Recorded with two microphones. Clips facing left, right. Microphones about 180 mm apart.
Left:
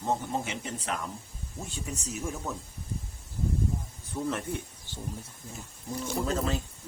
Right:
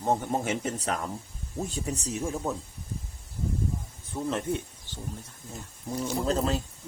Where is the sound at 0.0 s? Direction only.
50° right (ahead or behind); by 2.3 s 30° right (ahead or behind).